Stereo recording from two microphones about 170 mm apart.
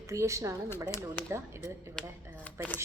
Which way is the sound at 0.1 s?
20° right (ahead or behind).